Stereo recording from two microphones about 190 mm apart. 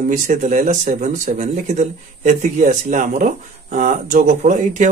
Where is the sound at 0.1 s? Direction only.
40° right (ahead or behind).